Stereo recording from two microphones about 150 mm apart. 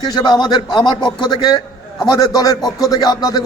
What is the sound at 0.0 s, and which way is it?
Speech, 25° left (ahead or behind).